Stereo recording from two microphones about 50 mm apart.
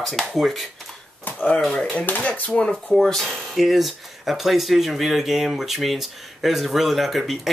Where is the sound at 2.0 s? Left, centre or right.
Left.